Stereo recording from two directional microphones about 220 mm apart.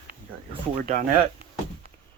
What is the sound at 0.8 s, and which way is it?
Speech, 40° right (ahead or behind).